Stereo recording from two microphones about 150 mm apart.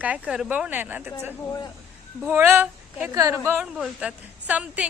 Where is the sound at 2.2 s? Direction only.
15° right (ahead or behind).